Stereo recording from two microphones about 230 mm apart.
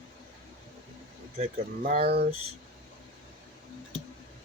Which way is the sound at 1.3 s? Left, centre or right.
Right.